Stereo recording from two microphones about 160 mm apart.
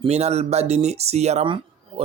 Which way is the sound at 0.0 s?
40° right (ahead or behind).